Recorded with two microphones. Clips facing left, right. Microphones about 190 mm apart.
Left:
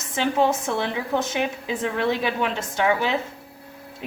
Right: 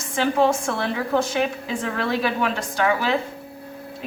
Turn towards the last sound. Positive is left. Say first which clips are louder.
# right 1 dB
turn(degrees=20)  # may be behind; listen again after turning